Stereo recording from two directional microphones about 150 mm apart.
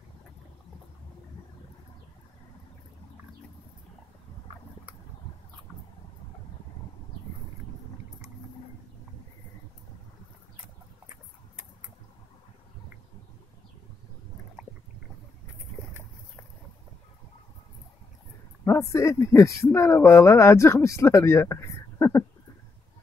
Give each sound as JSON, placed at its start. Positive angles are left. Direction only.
{"t": 18.6, "sound": "speech", "side_deg": 15}